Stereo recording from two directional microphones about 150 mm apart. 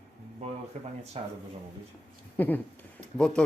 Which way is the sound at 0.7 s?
55° right (ahead or behind).